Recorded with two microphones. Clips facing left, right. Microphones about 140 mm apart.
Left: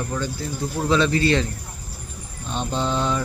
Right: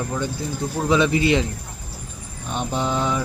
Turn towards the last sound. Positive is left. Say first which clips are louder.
# even
turn(degrees=-15)  # may be behind; listen again after turning